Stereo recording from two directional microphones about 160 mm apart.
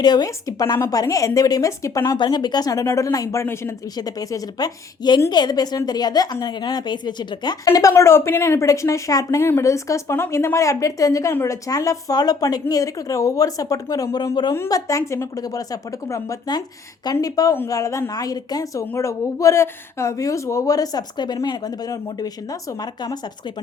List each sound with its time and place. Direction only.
0.0 s a woman's voice: 25° left (ahead or behind)